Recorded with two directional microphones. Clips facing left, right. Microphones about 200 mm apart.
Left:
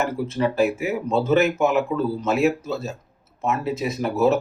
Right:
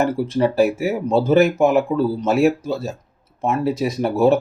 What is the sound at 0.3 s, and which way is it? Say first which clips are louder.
Speech: right 2 dB; 35° right (ahead or behind).